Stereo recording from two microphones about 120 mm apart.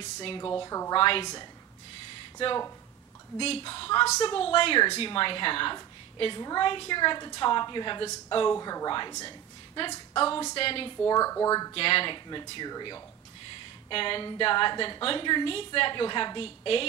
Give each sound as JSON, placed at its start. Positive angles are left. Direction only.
{"t": 0.0, "sound": "a woman's voice", "side_deg": 45}
{"t": 0.6, "sound": "speech", "side_deg": 25}
{"t": 0.9, "sound": "a woman's voice", "side_deg": 45}
{"t": 3.3, "sound": "a woman's voice", "side_deg": 50}
{"t": 8.5, "sound": "a woman's voice", "side_deg": 30}
{"t": 11.1, "sound": "speech", "side_deg": 30}
{"t": 11.7, "sound": "a woman's voice", "side_deg": 50}
{"t": 13.8, "sound": "a woman's voice", "side_deg": 45}